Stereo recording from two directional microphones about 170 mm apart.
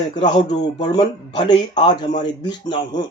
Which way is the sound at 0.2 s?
40° left (ahead or behind).